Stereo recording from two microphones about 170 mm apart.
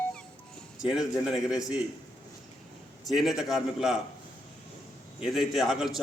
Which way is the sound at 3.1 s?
Centre (ahead or behind).